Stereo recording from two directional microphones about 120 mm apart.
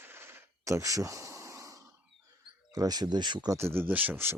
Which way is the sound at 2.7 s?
30° right (ahead or behind).